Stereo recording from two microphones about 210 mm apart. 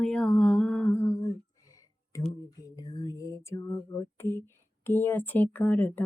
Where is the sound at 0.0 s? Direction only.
5° left (ahead or behind).